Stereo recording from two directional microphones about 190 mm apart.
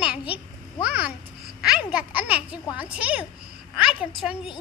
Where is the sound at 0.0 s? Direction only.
5° right (ahead or behind).